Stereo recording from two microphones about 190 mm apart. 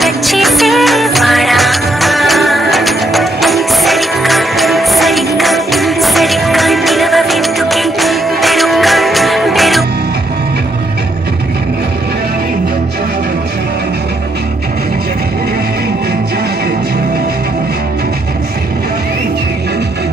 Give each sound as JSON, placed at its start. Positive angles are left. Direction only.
{"t": 0.0, "sound": "music", "side_deg": 0}